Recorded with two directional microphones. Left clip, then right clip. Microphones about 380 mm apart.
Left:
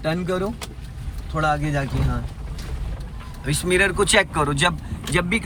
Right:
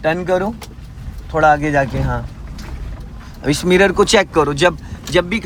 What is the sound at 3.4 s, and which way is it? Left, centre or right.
Speech, centre.